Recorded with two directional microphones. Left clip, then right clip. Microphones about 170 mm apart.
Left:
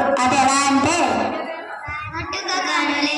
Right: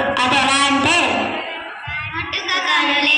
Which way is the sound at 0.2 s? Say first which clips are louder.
Right 5 dB; 30° left (ahead or behind).